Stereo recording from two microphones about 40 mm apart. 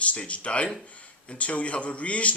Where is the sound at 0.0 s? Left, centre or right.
Left.